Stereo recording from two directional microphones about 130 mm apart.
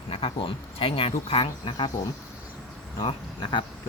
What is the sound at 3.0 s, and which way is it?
Speech, 40° left (ahead or behind).